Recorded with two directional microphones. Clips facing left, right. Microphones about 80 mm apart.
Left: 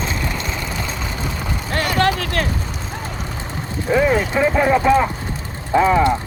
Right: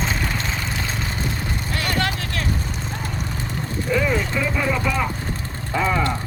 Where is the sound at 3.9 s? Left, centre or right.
Left.